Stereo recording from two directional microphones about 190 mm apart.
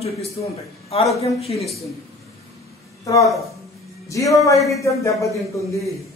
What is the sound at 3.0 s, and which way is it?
A man's voice, 15° left (ahead or behind).